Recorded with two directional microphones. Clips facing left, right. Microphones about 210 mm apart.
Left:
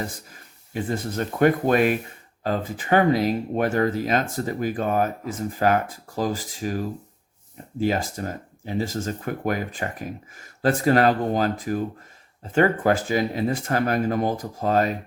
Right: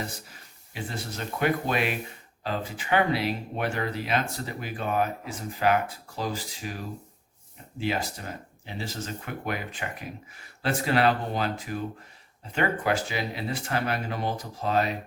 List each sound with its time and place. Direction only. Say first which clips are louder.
0.7 s speech: left 8 dB; 50° left (ahead or behind)